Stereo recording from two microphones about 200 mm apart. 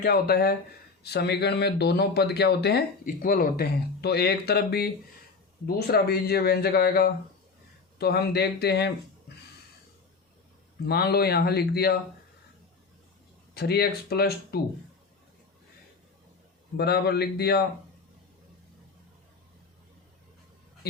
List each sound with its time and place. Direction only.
0.0 s speech: 50° left (ahead or behind)
10.8 s speech: 50° left (ahead or behind)
13.5 s speech: 50° left (ahead or behind)
16.7 s speech: 55° left (ahead or behind)